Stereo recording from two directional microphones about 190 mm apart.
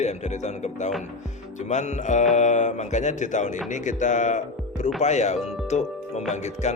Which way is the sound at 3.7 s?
40° left (ahead or behind).